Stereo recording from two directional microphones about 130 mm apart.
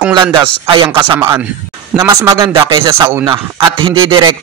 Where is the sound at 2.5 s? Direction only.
40° right (ahead or behind).